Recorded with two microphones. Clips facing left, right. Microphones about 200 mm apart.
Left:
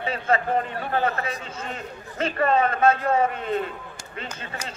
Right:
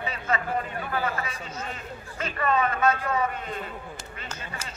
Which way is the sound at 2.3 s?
35° left (ahead or behind).